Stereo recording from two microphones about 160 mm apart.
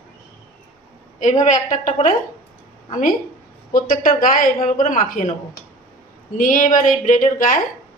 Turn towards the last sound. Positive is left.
turn(degrees=55)  # may be behind; listen again after turning